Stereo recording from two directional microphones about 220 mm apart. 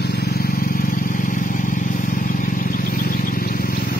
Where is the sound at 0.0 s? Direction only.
45° left (ahead or behind).